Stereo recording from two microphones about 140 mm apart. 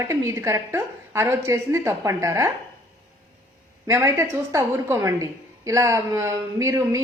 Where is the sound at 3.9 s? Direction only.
20° right (ahead or behind).